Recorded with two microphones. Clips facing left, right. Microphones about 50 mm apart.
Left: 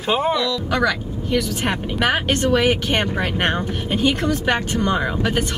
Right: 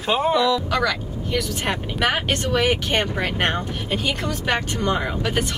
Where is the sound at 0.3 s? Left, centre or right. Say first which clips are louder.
Right 2 dB; centre.